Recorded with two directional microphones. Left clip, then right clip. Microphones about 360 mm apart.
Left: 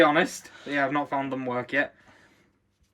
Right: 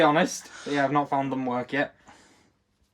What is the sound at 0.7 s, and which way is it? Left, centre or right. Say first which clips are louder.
Speech: right 2 dB; centre.